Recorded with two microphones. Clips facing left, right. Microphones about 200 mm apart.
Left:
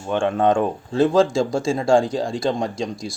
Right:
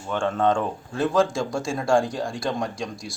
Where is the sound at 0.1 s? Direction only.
20° left (ahead or behind).